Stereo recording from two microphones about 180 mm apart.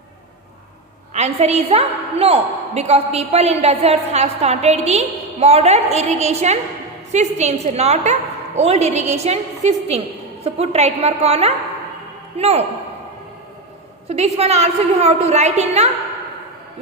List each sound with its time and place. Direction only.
1.1 s a woman's voice: 40° right (ahead or behind)
14.1 s a woman's voice: 35° right (ahead or behind)